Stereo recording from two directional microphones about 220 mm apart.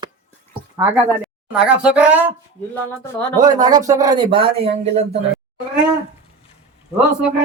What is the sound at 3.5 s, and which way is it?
Speech, 15° right (ahead or behind).